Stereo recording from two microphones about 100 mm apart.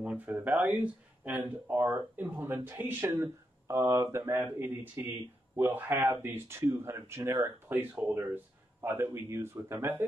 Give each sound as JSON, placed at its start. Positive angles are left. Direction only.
{"t": 0.0, "sound": "speech", "side_deg": -15}
{"t": 3.1, "sound": "a sound", "side_deg": -40}
{"t": 3.7, "sound": "speech", "side_deg": -25}